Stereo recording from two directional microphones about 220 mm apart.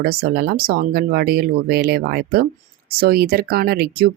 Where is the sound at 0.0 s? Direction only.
45° right (ahead or behind).